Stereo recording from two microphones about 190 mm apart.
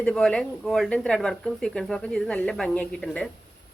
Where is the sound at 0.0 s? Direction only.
5° left (ahead or behind).